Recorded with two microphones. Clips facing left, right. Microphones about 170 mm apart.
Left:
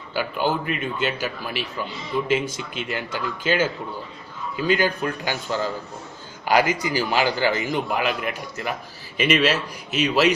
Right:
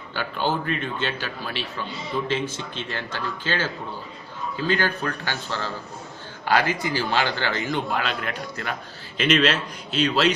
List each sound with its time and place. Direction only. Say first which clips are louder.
0.1 s a man's voice: left 2 dB; 10° left (ahead or behind)